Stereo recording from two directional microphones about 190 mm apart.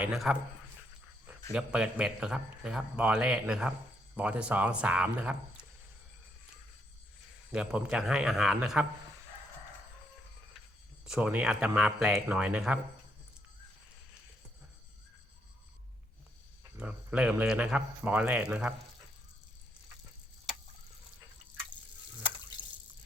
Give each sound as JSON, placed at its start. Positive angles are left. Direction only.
{"t": 0.0, "sound": "a man's voice", "side_deg": 0}
{"t": 1.5, "sound": "a man's voice", "side_deg": -5}
{"t": 7.5, "sound": "a man's voice", "side_deg": -5}
{"t": 11.0, "sound": "a man's voice", "side_deg": -5}
{"t": 16.7, "sound": "speech", "side_deg": -5}